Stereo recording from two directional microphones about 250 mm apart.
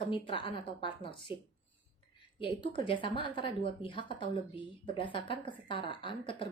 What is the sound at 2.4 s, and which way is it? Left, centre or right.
A woman's voice, centre.